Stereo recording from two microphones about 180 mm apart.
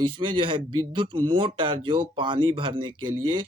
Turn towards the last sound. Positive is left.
turn(degrees=-25)  # may be behind; listen again after turning